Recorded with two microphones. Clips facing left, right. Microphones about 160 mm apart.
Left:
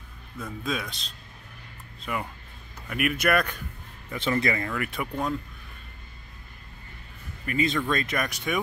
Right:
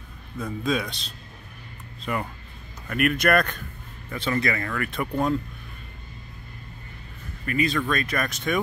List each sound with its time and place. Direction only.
0.4 s a man's voice: centre (ahead or behind)
4.1 s speech: 25° left (ahead or behind)
7.4 s speech: 20° left (ahead or behind)